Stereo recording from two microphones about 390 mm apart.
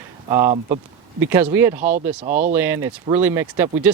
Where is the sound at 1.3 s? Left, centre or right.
Centre.